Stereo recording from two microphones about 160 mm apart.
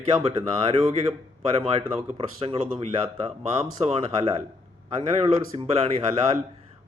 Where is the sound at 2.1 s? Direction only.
40° right (ahead or behind).